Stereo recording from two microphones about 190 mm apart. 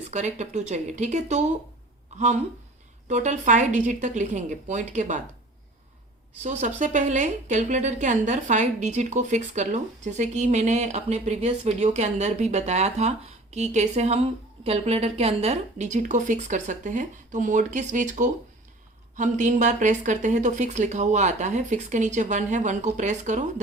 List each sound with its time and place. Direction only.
0.1 s a woman's voice: 40° right (ahead or behind)
6.4 s a woman's voice: 40° right (ahead or behind)